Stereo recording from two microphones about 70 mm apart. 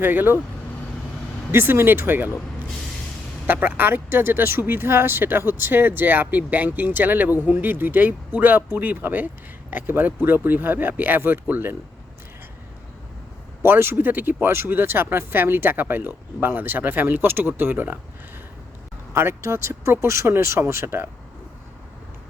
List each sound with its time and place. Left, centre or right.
0.0 s speech: right
1.5 s speech: right
3.4 s speech: right
13.6 s speech: right
19.1 s speech: right